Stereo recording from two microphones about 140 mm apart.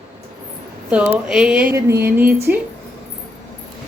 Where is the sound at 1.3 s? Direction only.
5° right (ahead or behind).